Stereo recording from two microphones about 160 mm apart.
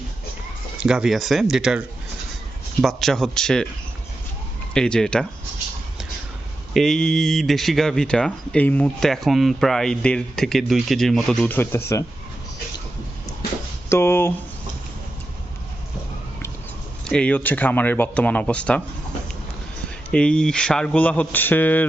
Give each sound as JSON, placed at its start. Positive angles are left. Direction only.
{"t": 0.8, "sound": "speech", "side_deg": -5}
{"t": 2.8, "sound": "speech", "side_deg": 0}
{"t": 4.7, "sound": "speech", "side_deg": 5}
{"t": 6.7, "sound": "speech", "side_deg": 5}
{"t": 13.9, "sound": "speech", "side_deg": 15}
{"t": 17.0, "sound": "speech", "side_deg": 5}
{"t": 20.1, "sound": "speech", "side_deg": 5}